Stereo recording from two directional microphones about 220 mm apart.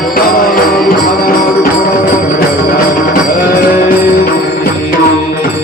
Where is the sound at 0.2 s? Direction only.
40° left (ahead or behind).